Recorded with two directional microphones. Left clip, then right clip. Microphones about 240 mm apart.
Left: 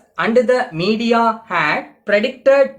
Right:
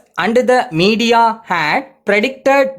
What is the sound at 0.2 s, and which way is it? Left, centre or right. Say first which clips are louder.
Speech: right 2 dB; right.